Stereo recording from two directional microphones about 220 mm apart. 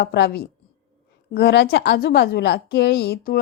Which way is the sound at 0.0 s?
45° left (ahead or behind).